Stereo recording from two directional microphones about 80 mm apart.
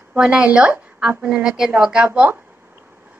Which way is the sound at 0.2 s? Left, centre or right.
Centre.